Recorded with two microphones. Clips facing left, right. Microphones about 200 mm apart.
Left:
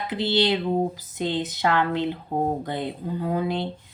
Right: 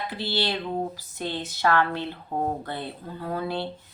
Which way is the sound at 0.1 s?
20° left (ahead or behind).